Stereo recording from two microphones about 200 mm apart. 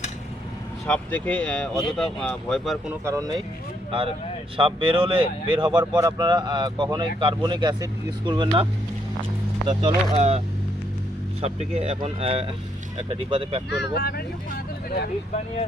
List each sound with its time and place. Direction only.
0.9 s speech: 5° left (ahead or behind)
3.0 s speech: 15° right (ahead or behind)
4.5 s speech: 25° right (ahead or behind)
9.6 s speech: 30° right (ahead or behind)
11.4 s speech: 30° right (ahead or behind)
13.9 s speech: 50° left (ahead or behind)